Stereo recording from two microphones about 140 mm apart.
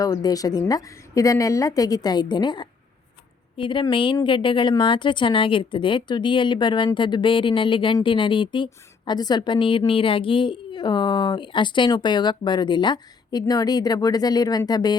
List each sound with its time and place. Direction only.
0.0 s a woman's voice: 25° left (ahead or behind)